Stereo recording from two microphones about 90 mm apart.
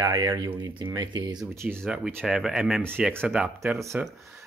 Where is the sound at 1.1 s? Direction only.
50° right (ahead or behind).